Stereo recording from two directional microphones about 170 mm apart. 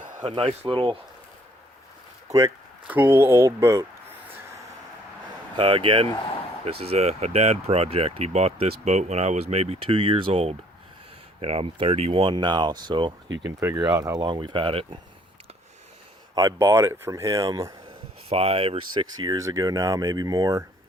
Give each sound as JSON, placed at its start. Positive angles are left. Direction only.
{"t": 0.3, "sound": "speech", "side_deg": -35}
{"t": 2.3, "sound": "speech", "side_deg": -40}
{"t": 2.8, "sound": "speech", "side_deg": -10}
{"t": 5.5, "sound": "speech", "side_deg": -30}
{"t": 13.6, "sound": "speech", "side_deg": -15}
{"t": 16.3, "sound": "speech", "side_deg": -20}
{"t": 18.3, "sound": "speech", "side_deg": -35}